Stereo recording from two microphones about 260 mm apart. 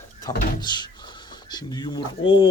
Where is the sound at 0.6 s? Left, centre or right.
Centre.